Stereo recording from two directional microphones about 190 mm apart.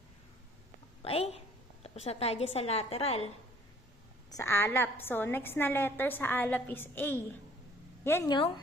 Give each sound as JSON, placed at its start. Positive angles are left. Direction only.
{"t": 1.0, "sound": "a woman's voice", "side_deg": 30}
{"t": 4.3, "sound": "a woman's voice", "side_deg": 15}